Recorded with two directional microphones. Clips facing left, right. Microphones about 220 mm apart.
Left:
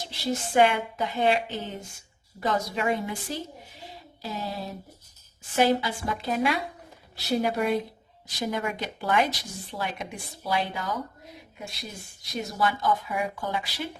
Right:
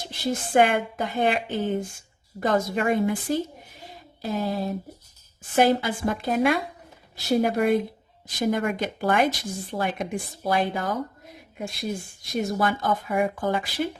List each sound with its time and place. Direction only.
0.1 s a woman's voice: 50° right (ahead or behind)